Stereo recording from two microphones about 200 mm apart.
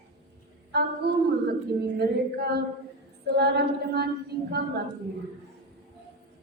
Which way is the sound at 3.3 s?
55° right (ahead or behind).